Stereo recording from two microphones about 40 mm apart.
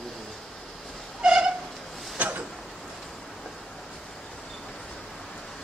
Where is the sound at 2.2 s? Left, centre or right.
Right.